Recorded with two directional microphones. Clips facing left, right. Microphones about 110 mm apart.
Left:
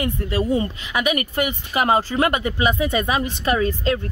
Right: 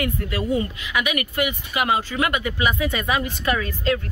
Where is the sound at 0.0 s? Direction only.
30° left (ahead or behind).